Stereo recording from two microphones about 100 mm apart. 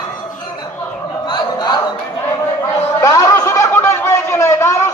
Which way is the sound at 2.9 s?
40° left (ahead or behind).